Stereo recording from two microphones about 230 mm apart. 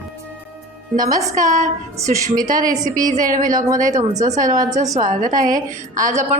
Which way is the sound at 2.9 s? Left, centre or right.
Right.